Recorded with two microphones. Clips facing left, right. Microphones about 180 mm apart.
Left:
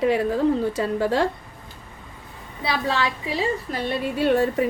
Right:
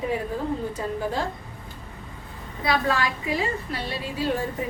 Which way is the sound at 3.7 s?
55° left (ahead or behind).